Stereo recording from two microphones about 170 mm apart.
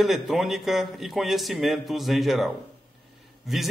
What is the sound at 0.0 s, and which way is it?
Speech, centre (ahead or behind).